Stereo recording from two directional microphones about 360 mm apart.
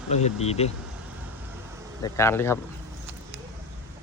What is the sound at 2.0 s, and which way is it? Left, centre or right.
Speech, centre.